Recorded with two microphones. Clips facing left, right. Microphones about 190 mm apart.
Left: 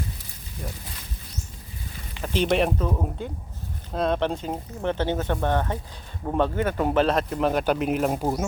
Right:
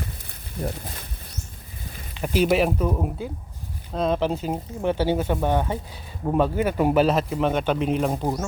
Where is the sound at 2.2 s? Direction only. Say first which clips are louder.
Right 2 dB; 10° right (ahead or behind).